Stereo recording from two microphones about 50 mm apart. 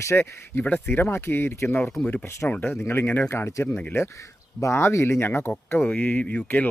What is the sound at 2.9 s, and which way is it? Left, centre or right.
Speech, left.